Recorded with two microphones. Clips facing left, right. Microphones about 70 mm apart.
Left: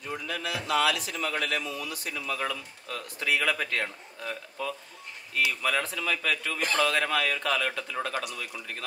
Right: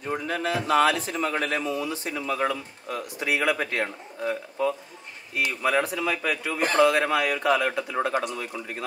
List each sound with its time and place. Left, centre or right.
0.0 s speech: right